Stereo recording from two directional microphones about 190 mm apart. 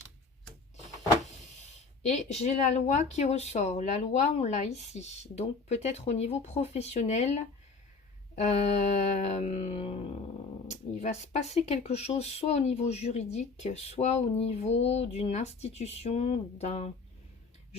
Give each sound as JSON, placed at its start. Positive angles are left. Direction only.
{"t": 2.0, "sound": "speech", "side_deg": 35}